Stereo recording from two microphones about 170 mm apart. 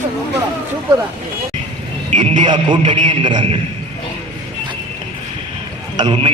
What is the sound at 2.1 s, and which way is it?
A man's voice, 25° right (ahead or behind).